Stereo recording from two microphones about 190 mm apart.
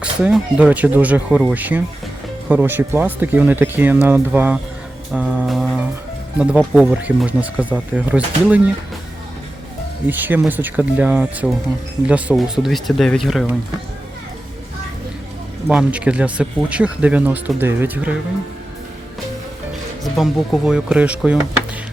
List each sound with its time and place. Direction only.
0.0 s speech: 5° right (ahead or behind)
5.1 s music: 5° right (ahead or behind)
6.4 s speech: 5° right (ahead or behind)
10.1 s speech: 10° right (ahead or behind)
15.6 s speech: 5° right (ahead or behind)
20.1 s speech: centre (ahead or behind)